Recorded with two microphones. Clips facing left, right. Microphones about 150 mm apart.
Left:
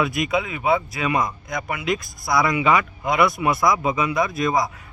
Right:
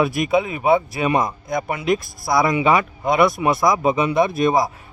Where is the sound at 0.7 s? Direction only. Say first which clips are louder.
Right 4 dB; 30° right (ahead or behind).